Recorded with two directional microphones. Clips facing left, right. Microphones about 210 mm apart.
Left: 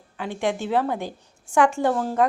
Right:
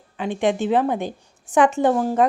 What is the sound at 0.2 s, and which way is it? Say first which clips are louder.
A woman's voice: right 5 dB; 20° right (ahead or behind).